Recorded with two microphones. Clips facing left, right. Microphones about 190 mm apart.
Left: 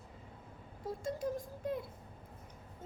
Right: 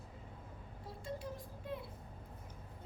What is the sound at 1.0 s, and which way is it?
Speech, 45° left (ahead or behind).